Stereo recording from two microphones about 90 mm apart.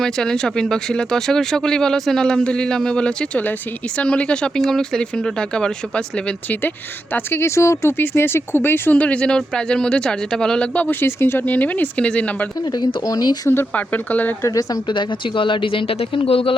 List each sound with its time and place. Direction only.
0.0 s speech: 5° left (ahead or behind)
6.6 s speech: 20° left (ahead or behind); by 10.7 s 5° left (ahead or behind)
10.8 s speech: 20° left (ahead or behind)
12.5 s speech: 55° left (ahead or behind)
13.0 s speech: 45° left (ahead or behind)
13.5 s speech: 20° left (ahead or behind)
14.4 s speech: 40° left (ahead or behind)
14.8 s speech: 65° left (ahead or behind); by 16.6 s 90° left